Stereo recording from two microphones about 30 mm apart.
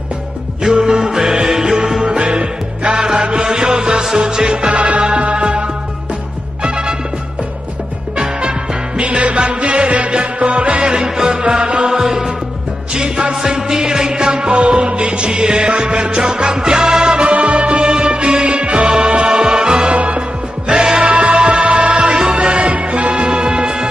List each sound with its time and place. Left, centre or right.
0.7 s music: right
2.0 s music: right
3.4 s music: centre
8.2 s music: right
9.0 s music: right
11.0 s music: right
17.3 s music: right
17.8 s music: right
19.9 s music: right
20.2 s music: right
21.0 s music: right